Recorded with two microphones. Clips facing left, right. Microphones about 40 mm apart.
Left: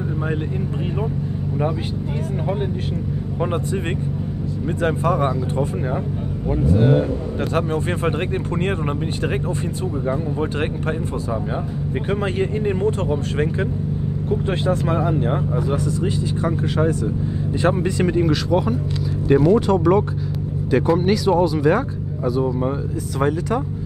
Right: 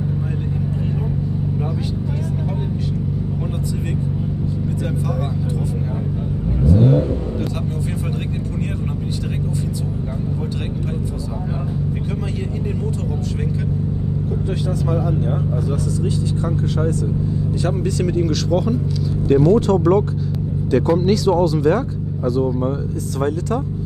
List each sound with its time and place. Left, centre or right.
3.3 s speech: left
12.1 s speech: left; by 23.6 s centre